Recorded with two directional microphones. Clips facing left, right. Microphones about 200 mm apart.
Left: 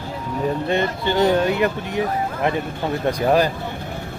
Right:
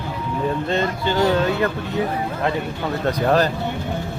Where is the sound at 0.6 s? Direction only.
15° left (ahead or behind).